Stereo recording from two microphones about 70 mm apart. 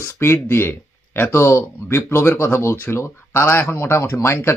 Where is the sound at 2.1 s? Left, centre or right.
Left.